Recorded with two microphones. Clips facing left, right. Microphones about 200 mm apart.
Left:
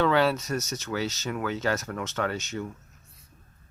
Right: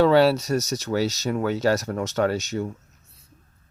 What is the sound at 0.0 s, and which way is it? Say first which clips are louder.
Speech: right 6 dB; 35° right (ahead or behind).